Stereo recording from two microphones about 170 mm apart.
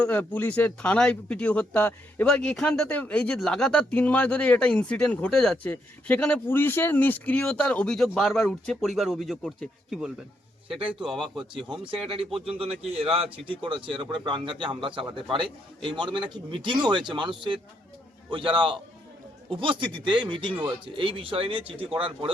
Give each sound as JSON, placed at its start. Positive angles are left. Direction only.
{"t": 0.0, "sound": "speech", "side_deg": 10}
{"t": 10.7, "sound": "a man's voice", "side_deg": -30}